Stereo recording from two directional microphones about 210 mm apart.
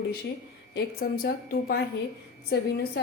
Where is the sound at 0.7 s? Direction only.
45° left (ahead or behind).